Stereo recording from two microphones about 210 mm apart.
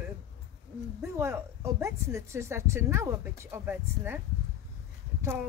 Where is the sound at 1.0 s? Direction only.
15° right (ahead or behind).